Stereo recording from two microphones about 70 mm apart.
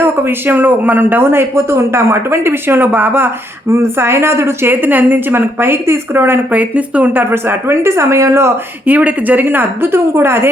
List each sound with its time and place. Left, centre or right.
0.0 s speech: right
6.6 s speech: right
8.9 s a woman's voice: right